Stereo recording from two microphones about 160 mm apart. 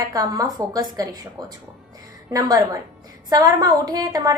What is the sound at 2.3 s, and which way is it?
A woman's voice, 20° right (ahead or behind).